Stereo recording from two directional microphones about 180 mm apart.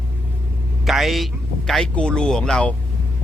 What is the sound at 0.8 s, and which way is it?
Speech, centre (ahead or behind).